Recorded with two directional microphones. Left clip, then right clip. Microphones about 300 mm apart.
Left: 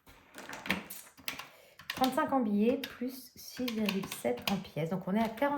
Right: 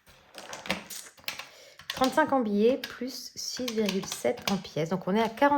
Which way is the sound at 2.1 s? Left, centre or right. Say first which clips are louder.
Right 6 dB; right.